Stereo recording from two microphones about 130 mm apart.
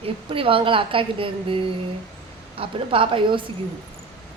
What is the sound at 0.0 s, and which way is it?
A woman's voice, 45° right (ahead or behind).